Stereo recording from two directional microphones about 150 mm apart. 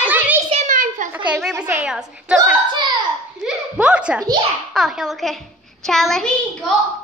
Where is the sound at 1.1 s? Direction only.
10° right (ahead or behind).